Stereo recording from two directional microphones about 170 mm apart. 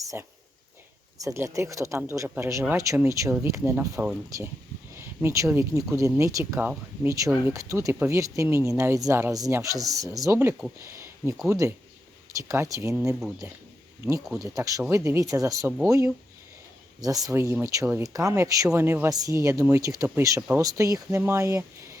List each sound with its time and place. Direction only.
0.0 s speech: 20° right (ahead or behind)
10.8 s a sound: 15° right (ahead or behind)
11.4 s speech: 20° right (ahead or behind)
14.3 s speech: centre (ahead or behind)
14.5 s speech: 20° right (ahead or behind)
17.0 s speech: 20° right (ahead or behind)